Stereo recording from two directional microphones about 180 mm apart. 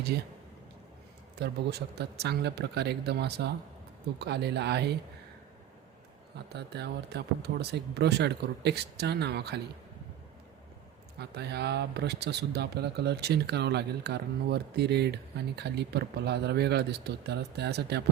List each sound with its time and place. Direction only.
1.4 s speech: 70° right (ahead or behind)
6.5 s speech: 65° right (ahead or behind)
11.2 s speech: 65° right (ahead or behind)